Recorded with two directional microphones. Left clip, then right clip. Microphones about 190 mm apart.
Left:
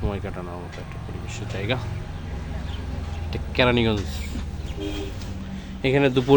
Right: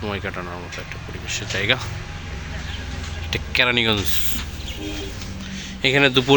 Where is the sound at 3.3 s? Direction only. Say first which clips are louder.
Right 2 dB; centre (ahead or behind).